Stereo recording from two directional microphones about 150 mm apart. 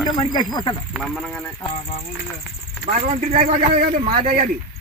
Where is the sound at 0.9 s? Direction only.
Centre (ahead or behind).